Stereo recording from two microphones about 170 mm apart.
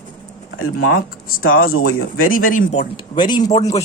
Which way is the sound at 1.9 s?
60° left (ahead or behind).